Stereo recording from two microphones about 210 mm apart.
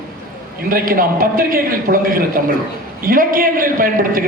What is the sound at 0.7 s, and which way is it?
A man's voice, 45° right (ahead or behind).